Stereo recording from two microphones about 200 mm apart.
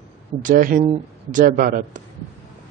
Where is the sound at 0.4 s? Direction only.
40° right (ahead or behind).